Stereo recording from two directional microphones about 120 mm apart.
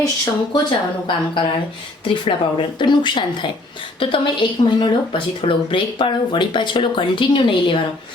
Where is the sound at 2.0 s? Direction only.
45° left (ahead or behind).